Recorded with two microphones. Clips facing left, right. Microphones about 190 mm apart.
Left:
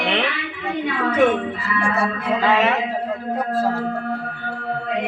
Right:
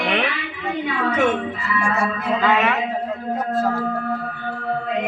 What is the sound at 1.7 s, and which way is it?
Speech, 30° left (ahead or behind).